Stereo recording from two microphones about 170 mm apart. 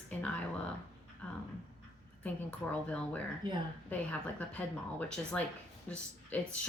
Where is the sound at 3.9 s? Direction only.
10° left (ahead or behind).